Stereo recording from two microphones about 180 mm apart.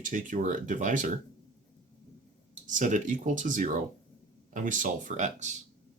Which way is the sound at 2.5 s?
45° right (ahead or behind).